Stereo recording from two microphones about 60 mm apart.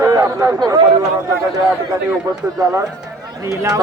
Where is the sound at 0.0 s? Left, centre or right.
Right.